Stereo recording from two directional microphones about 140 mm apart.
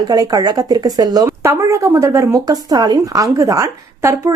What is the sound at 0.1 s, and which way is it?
Speech, 25° right (ahead or behind).